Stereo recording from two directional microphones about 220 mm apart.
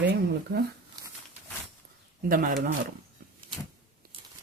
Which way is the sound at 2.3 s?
40° right (ahead or behind).